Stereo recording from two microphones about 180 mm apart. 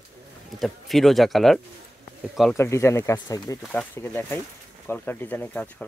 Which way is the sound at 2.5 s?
15° left (ahead or behind).